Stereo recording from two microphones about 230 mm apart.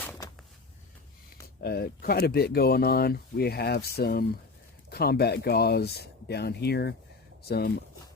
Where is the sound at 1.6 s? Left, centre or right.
Left.